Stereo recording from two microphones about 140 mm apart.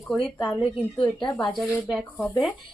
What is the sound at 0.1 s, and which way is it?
Speech, centre (ahead or behind).